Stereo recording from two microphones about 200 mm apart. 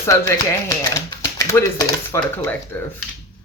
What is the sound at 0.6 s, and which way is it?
Speech, 15° left (ahead or behind).